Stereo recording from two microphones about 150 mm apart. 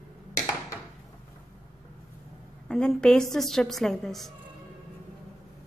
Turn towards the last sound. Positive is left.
turn(degrees=0)  # may be behind; listen again after turning